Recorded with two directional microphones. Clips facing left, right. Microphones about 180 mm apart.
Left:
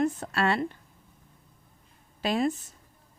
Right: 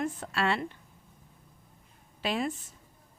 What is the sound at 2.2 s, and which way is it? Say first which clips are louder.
Speech: left 5 dB; 40° left (ahead or behind).